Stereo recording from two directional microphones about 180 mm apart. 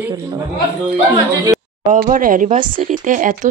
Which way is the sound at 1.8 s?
45° right (ahead or behind).